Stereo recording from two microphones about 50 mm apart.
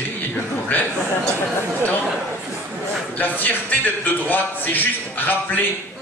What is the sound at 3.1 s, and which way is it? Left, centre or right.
A man's voice, left.